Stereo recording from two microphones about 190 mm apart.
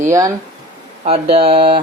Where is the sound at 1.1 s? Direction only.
30° right (ahead or behind).